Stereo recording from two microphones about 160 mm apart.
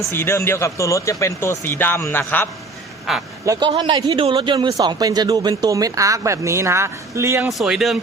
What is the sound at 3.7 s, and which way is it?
A man's voice, 30° right (ahead or behind).